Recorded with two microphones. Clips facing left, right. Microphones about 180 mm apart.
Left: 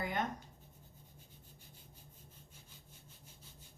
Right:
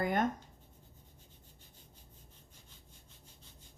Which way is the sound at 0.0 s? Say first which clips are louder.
Right 6 dB; 50° right (ahead or behind).